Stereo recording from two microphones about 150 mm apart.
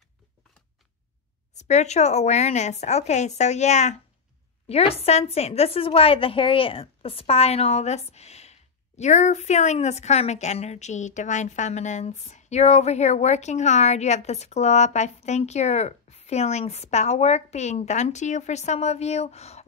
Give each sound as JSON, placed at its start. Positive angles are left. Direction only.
{"t": 1.6, "sound": "a woman's voice", "side_deg": 50}